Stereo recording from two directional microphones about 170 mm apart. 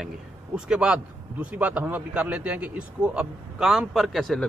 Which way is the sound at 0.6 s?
5° right (ahead or behind).